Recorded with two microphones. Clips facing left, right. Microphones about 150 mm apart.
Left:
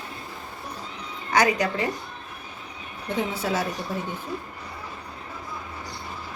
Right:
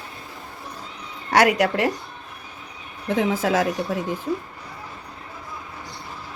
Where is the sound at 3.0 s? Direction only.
90° right.